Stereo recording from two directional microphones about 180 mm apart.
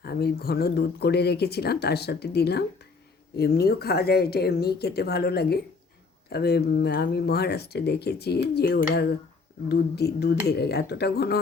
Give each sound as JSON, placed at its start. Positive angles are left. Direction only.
{"t": 0.0, "sound": "speech", "side_deg": 60}